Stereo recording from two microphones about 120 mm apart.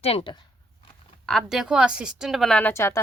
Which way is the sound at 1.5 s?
5° right (ahead or behind).